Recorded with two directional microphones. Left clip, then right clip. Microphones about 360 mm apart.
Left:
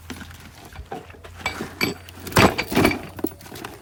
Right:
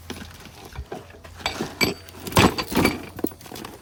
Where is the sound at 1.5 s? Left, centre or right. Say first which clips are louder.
Right 4 dB; centre.